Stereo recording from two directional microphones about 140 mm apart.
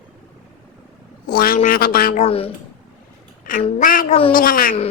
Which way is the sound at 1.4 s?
80° left.